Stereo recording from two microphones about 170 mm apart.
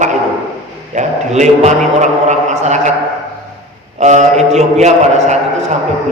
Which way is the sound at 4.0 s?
45° right (ahead or behind).